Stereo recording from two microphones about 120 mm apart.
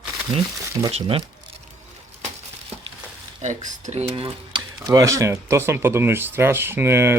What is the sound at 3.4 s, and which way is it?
Speech, 85° right.